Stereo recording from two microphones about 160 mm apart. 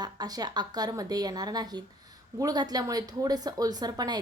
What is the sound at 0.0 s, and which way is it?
Speech, 25° right (ahead or behind).